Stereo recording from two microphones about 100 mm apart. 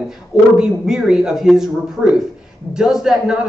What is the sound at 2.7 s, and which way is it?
Speech, 5° right (ahead or behind).